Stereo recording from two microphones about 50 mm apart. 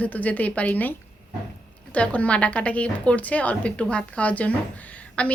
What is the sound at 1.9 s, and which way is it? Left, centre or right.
A woman's voice, left.